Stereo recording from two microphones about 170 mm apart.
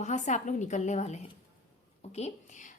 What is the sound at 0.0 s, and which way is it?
Speech, 45° left (ahead or behind).